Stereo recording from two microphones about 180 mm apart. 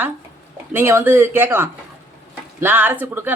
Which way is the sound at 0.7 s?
15° right (ahead or behind).